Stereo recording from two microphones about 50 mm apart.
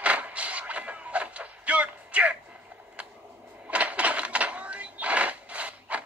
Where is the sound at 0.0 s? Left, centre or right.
Right.